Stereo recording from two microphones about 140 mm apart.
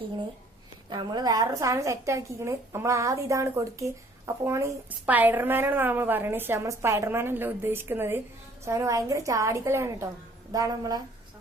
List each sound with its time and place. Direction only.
0.9 s a woman's voice: 30° right (ahead or behind)